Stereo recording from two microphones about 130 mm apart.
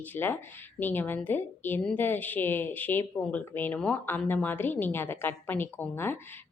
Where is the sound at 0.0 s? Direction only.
15° left (ahead or behind).